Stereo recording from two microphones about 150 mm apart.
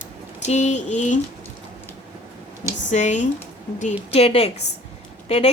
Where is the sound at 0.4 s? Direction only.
50° left (ahead or behind).